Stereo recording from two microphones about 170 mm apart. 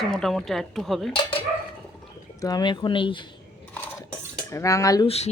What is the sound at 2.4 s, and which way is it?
Speech, 25° left (ahead or behind).